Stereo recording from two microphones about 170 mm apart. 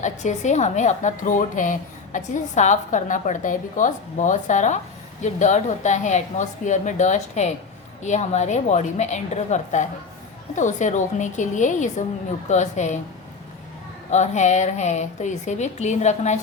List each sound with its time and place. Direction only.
0.0 s a woman's voice: 45° left (ahead or behind)
14.1 s a woman's voice: 45° left (ahead or behind)